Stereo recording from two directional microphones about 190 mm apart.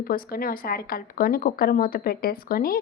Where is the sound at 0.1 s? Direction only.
50° left (ahead or behind).